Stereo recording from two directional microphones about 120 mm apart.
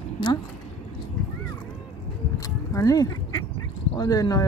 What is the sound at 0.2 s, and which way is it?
Speech, 40° left (ahead or behind).